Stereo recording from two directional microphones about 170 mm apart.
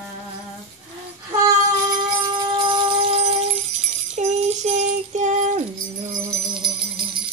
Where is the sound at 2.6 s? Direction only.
35° right (ahead or behind).